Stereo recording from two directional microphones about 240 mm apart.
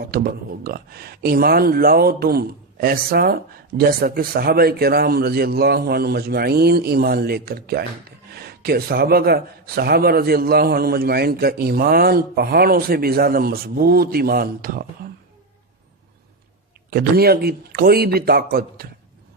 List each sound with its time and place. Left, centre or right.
0.0 s speech: right
16.9 s speech: right